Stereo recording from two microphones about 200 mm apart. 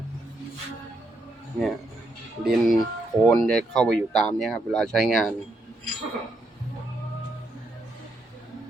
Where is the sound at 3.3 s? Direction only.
5° left (ahead or behind).